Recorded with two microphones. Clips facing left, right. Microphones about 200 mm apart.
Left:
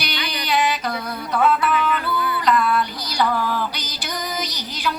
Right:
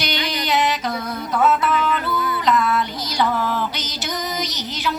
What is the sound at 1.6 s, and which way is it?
Music, 20° right (ahead or behind).